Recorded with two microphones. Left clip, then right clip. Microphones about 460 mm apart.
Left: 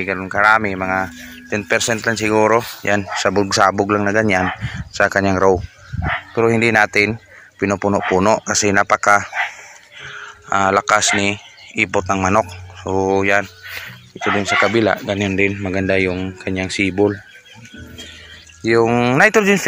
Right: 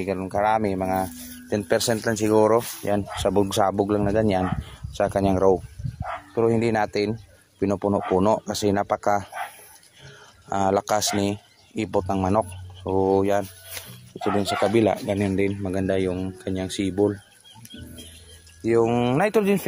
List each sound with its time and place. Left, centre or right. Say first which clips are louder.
0.0 s speech: left 8 dB; right
10.5 s speech: left 8 dB; right
18.7 s speech: left 6 dB; right